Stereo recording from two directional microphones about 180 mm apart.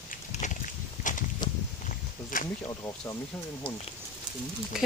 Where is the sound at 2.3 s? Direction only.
50° left (ahead or behind).